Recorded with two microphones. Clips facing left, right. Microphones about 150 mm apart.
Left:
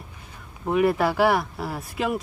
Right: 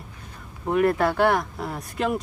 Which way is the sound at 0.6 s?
5° left (ahead or behind).